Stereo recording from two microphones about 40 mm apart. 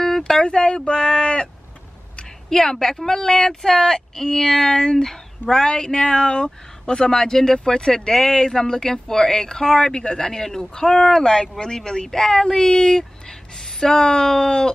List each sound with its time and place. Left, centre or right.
0.0 s speech: centre